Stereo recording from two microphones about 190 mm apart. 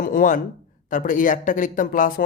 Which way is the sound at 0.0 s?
45° left (ahead or behind).